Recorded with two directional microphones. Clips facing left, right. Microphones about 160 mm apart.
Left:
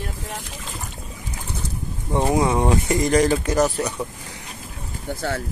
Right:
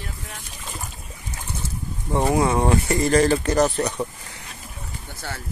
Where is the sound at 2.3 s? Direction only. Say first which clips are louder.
Even; 15° left (ahead or behind).